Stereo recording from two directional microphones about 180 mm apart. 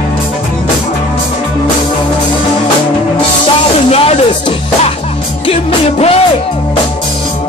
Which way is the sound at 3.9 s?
35° left (ahead or behind).